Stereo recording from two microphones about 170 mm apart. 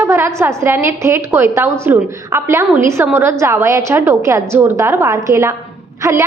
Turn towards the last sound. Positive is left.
turn(degrees=-20)  # may be behind; listen again after turning